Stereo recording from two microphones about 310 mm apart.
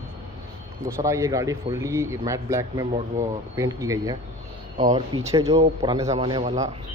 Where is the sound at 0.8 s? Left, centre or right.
Centre.